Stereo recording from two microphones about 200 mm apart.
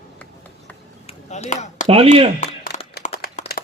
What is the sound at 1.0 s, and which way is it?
Chop, 35° left (ahead or behind).